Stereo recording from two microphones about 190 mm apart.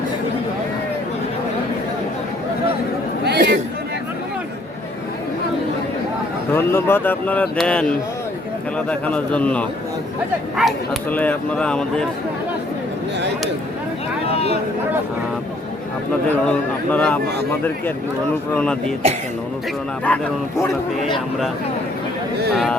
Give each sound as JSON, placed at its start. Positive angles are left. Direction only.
{"t": 3.2, "sound": "chatter", "side_deg": -60}
{"t": 6.5, "sound": "speech", "side_deg": 10}
{"t": 14.3, "sound": "a sound", "side_deg": 35}
{"t": 16.5, "sound": "speech", "side_deg": 5}
{"t": 18.5, "sound": "speech", "side_deg": 5}
{"t": 20.1, "sound": "speech", "side_deg": 10}
{"t": 22.5, "sound": "speech", "side_deg": 0}